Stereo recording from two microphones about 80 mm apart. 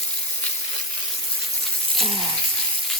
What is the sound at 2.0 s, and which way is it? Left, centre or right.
Frying, right.